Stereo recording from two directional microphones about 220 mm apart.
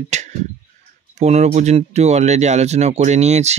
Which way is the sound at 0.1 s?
30° right (ahead or behind).